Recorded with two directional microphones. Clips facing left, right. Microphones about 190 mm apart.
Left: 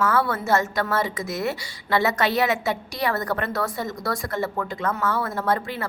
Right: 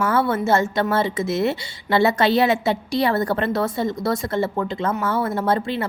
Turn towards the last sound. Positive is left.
turn(degrees=-25)  # may be behind; listen again after turning